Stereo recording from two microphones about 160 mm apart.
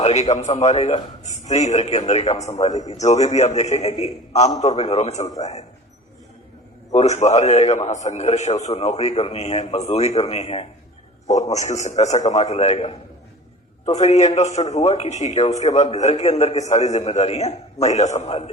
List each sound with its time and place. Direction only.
0.0 s a man's voice: 45° left (ahead or behind)
6.9 s a man's voice: 45° left (ahead or behind)
18.3 s a man's voice: 30° left (ahead or behind)